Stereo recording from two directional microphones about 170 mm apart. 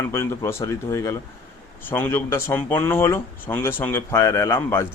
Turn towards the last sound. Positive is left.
turn(degrees=15)  # may be behind; listen again after turning